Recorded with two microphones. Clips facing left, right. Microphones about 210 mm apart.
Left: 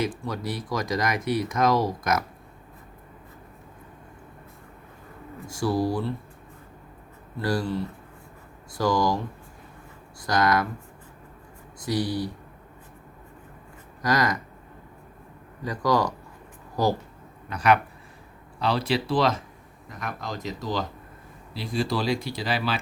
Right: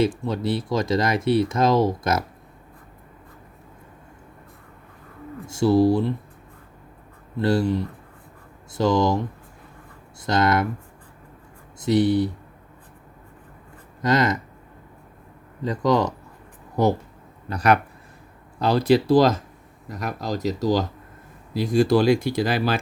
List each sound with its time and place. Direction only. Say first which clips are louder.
0.0 s speech: right 6 dB; 25° right (ahead or behind)
5.5 s speech: right 8 dB; 25° right (ahead or behind)
7.3 s speech: right 6 dB; 25° right (ahead or behind)
10.2 s speech: right 3 dB; 25° right (ahead or behind)
11.8 s speech: right 8 dB; 25° right (ahead or behind)
14.0 s speech: right 4 dB; 25° right (ahead or behind)
15.6 s speech: right 3 dB; 25° right (ahead or behind)
17.5 s speech: right 2 dB; 40° right (ahead or behind)